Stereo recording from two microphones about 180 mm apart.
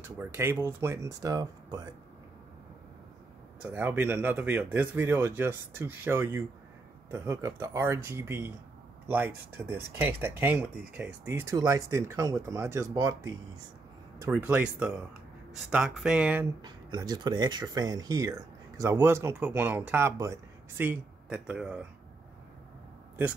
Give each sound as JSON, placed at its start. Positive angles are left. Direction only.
{"t": 0.2, "sound": "speech", "side_deg": -15}
{"t": 3.7, "sound": "speech", "side_deg": -10}
{"t": 16.6, "sound": "speech", "side_deg": -25}